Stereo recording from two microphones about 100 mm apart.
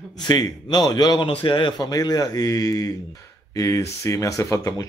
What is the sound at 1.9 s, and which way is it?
Speech, 40° left (ahead or behind).